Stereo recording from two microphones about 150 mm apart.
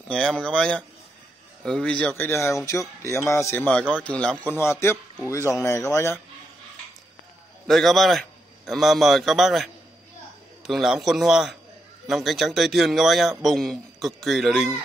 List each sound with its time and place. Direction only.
0.1 s a man's voice: 5° left (ahead or behind)
7.6 s a man's voice: centre (ahead or behind)
10.7 s a man's voice: centre (ahead or behind)